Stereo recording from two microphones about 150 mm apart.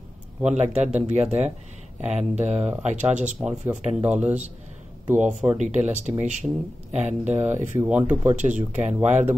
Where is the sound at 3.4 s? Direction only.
5° right (ahead or behind).